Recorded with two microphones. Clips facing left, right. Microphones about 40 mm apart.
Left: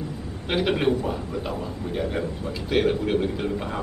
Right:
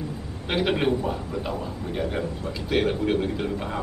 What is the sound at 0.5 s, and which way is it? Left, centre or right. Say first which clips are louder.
A man's voice: left 1 dB; centre.